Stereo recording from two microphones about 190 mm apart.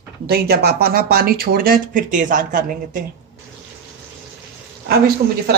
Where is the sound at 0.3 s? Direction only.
55° right (ahead or behind).